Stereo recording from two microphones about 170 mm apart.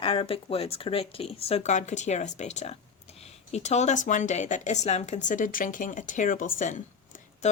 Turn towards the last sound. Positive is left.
turn(degrees=50)  # may be behind; listen again after turning